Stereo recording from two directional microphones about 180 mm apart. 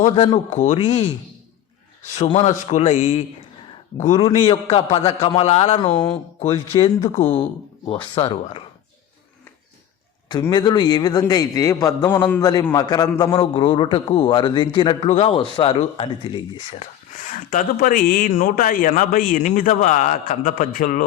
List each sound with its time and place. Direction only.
0.0 s a man's voice: 35° left (ahead or behind)
2.1 s a man's voice: 35° left (ahead or behind)
4.4 s a man's voice: 35° left (ahead or behind)
10.2 s a man's voice: 25° left (ahead or behind)
17.2 s speech: 45° left (ahead or behind)